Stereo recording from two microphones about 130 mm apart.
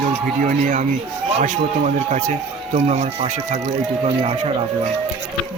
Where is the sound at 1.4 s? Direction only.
70° right (ahead or behind).